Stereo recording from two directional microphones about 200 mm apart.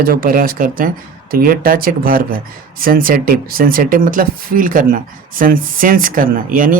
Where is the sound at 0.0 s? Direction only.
45° right (ahead or behind).